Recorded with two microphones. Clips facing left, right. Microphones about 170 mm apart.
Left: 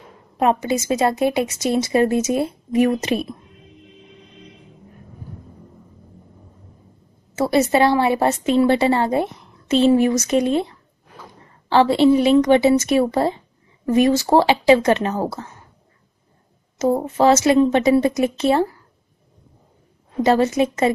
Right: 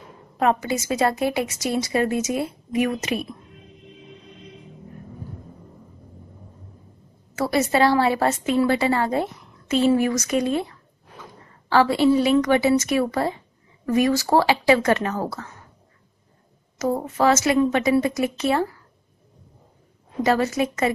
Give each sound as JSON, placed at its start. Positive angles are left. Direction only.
{"t": 0.4, "sound": "a woman's voice", "side_deg": 20}
{"t": 7.3, "sound": "a woman's voice", "side_deg": 25}
{"t": 16.7, "sound": "a woman's voice", "side_deg": 25}
{"t": 20.2, "sound": "a woman's voice", "side_deg": 25}